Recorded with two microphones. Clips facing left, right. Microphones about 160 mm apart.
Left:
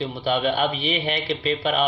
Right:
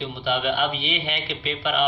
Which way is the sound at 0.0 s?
40° left (ahead or behind).